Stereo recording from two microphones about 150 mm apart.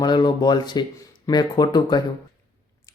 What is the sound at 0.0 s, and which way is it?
Speech, 30° left (ahead or behind).